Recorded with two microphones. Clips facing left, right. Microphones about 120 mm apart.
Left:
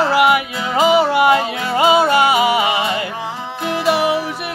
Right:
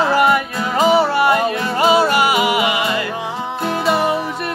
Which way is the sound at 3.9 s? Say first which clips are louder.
Left 2 dB; 10° left (ahead or behind).